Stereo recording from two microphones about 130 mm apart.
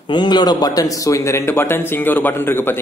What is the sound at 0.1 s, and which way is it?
A man's voice, 35° left (ahead or behind).